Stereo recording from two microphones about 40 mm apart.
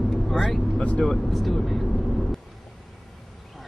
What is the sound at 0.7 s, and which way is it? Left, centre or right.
Speech, left.